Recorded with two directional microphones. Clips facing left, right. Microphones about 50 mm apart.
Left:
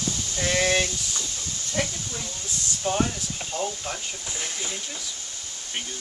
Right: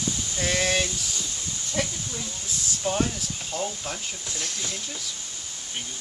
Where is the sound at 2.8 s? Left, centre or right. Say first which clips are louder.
Left 1 dB; centre.